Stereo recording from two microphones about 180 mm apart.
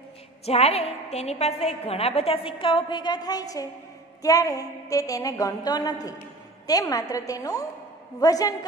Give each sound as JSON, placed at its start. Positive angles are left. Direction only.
{"t": 0.5, "sound": "a woman's voice", "side_deg": 35}